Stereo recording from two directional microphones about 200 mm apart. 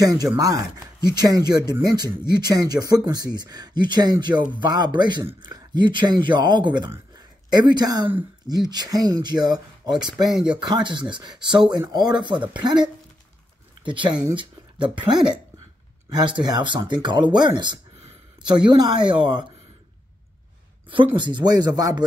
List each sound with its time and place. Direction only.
0.0 s speech: 15° right (ahead or behind)
10.3 s speech: 5° right (ahead or behind)
10.7 s speech: 25° right (ahead or behind)
21.2 s speech: 20° right (ahead or behind)